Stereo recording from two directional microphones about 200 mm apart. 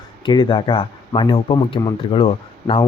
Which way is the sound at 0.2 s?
25° left (ahead or behind).